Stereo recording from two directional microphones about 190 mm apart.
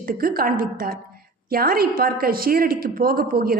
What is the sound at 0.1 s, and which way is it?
A woman's voice, 50° right (ahead or behind).